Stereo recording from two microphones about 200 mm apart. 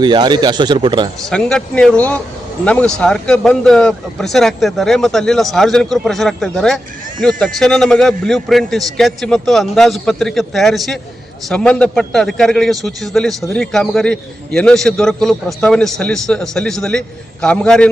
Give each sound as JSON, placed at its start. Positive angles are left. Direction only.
{"t": 0.0, "sound": "speech", "side_deg": -20}
{"t": 1.3, "sound": "speech", "side_deg": 5}